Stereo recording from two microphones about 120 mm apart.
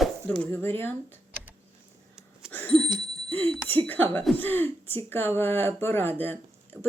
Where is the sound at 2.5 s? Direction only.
15° left (ahead or behind).